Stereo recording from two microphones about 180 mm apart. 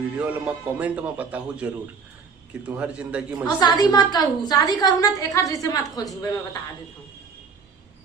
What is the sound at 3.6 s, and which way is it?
A woman's voice, 20° left (ahead or behind).